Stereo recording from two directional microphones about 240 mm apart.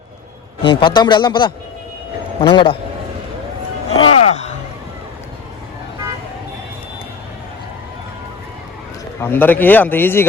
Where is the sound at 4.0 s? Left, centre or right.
Left.